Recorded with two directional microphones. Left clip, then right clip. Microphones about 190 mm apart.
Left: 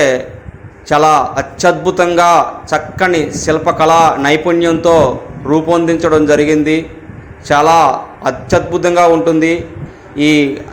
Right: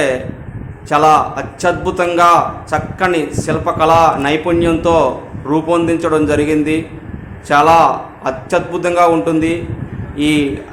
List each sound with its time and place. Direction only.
0.9 s a man's voice: 20° left (ahead or behind)